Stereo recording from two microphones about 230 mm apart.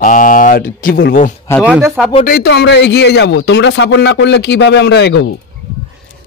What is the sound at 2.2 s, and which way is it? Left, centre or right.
Speech, left.